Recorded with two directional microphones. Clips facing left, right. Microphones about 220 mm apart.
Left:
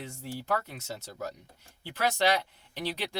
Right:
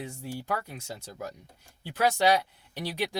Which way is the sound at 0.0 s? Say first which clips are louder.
Right 2 dB; 15° right (ahead or behind).